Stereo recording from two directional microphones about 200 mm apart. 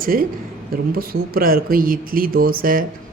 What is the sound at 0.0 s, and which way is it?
Speech, 45° right (ahead or behind).